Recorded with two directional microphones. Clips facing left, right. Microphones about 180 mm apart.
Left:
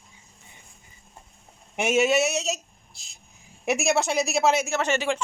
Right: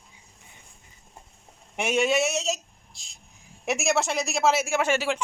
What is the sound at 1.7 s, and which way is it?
Speech, centre (ahead or behind).